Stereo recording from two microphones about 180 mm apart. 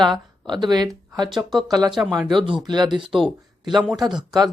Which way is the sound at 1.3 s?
Centre (ahead or behind).